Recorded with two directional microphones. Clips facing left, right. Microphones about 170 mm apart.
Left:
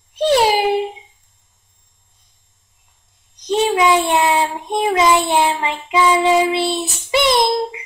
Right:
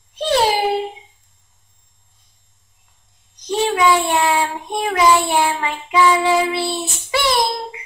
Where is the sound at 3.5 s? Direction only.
20° left (ahead or behind).